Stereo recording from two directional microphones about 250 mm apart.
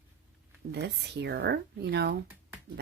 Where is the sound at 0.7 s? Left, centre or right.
Right.